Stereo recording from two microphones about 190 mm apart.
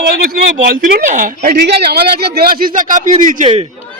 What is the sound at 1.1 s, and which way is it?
Speech, 40° right (ahead or behind).